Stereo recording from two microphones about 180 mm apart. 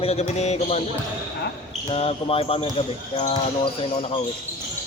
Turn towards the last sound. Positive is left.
turn(degrees=30)  # may be behind; listen again after turning